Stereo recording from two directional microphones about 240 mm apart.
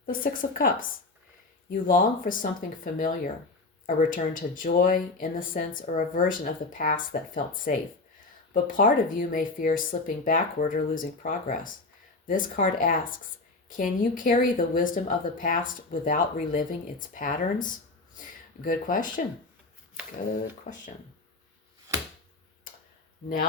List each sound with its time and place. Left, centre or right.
0.0 s speech: left
20.7 s speech: left